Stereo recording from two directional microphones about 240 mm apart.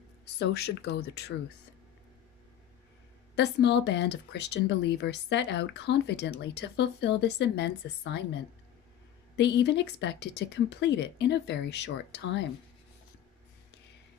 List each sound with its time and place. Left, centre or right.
0.3 s speech: left
3.3 s speech: left
9.3 s speech: left